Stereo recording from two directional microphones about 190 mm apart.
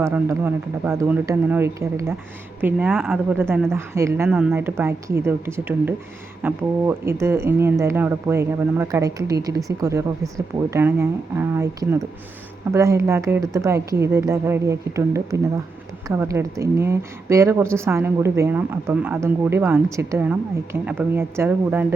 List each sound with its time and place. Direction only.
0.0 s a woman's voice: 10° right (ahead or behind)